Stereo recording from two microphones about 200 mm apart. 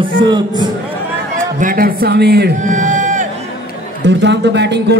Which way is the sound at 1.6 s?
45° right (ahead or behind).